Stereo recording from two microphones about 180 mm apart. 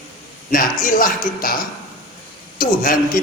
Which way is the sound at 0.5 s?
50° left (ahead or behind).